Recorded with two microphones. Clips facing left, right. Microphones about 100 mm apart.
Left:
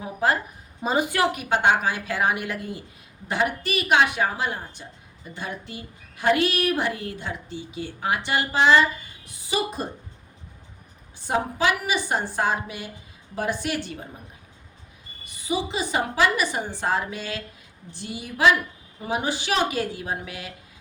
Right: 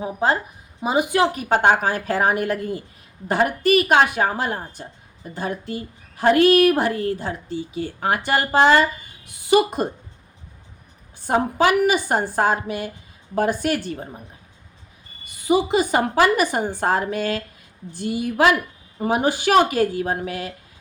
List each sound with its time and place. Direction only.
0.0 s speech: 25° right (ahead or behind)
0.8 s a woman's voice: 15° right (ahead or behind)
1.3 s a woman's voice: 40° right (ahead or behind)
9.2 s a woman's voice: 60° right (ahead or behind)
11.3 s a woman's voice: 45° right (ahead or behind)
15.4 s a woman's voice: 50° right (ahead or behind)